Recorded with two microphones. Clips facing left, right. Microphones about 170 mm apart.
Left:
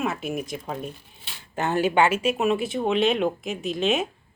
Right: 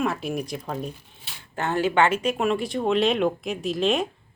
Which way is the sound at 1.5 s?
15° left (ahead or behind).